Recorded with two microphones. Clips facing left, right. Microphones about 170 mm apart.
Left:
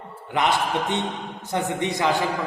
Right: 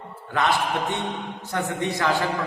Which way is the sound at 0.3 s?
20° left (ahead or behind).